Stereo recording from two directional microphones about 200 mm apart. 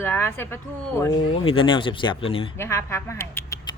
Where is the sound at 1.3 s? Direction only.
25° left (ahead or behind).